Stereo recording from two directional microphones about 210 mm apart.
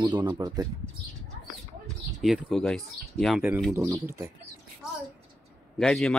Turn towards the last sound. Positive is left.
turn(degrees=0)  # may be behind; listen again after turning